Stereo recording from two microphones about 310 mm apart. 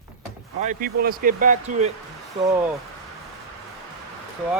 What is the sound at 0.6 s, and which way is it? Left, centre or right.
Speech, right.